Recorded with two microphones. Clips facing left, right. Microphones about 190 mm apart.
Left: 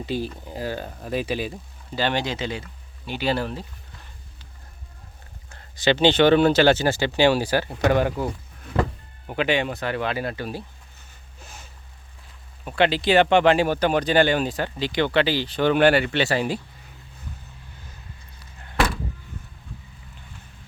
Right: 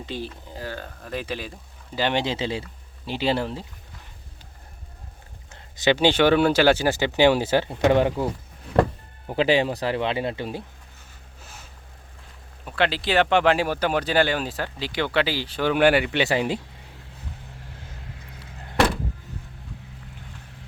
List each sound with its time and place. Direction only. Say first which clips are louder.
0.0 s speech: left 5 dB; 10° left (ahead or behind)
2.0 s speech: even; 15° right (ahead or behind)
2.2 s speech: right 2 dB; 30° right (ahead or behind)
5.5 s speech: even; 20° right (ahead or behind)
9.2 s speech: right 3 dB; 30° right (ahead or behind)
12.6 s speech: left 4 dB; centre (ahead or behind); by 16.6 s 15° right (ahead or behind)
18.0 s vehicle: right 5 dB; 75° right (ahead or behind)